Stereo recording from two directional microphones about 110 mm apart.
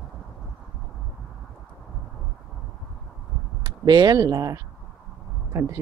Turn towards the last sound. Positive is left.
turn(degrees=-30)  # may be behind; listen again after turning